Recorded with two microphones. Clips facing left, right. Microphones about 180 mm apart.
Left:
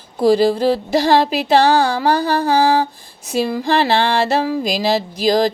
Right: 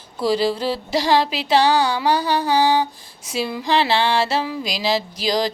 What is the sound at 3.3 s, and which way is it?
Music, 45° left (ahead or behind).